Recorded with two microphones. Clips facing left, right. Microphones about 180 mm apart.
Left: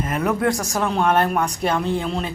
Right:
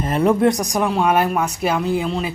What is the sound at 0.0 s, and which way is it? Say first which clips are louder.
A woman's voice: right 5 dB; 30° right (ahead or behind).